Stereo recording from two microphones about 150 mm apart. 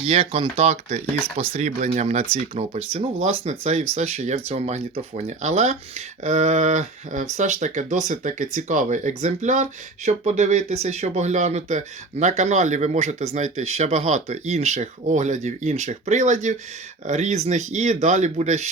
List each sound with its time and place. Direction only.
0.0 s speech: 40° right (ahead or behind)